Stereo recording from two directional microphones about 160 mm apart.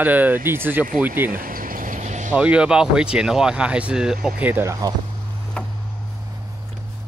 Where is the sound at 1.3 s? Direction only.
60° right (ahead or behind).